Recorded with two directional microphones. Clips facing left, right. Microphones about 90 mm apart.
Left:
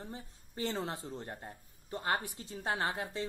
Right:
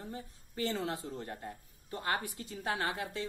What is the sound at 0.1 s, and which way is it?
A woman's voice, 25° left (ahead or behind).